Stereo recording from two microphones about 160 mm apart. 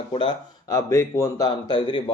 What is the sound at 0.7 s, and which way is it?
A man's voice, 20° left (ahead or behind).